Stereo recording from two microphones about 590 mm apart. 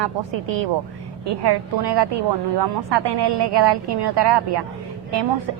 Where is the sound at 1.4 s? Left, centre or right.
Right.